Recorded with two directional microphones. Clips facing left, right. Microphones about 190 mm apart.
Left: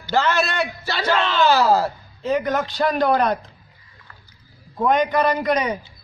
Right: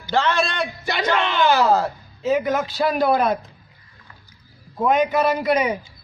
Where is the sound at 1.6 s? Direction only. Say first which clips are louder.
Even; 5° left (ahead or behind).